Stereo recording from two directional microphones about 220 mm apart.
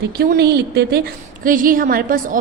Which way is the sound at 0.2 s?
45° right (ahead or behind).